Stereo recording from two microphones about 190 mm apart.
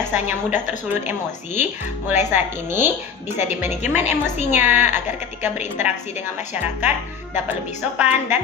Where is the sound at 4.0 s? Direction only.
35° left (ahead or behind).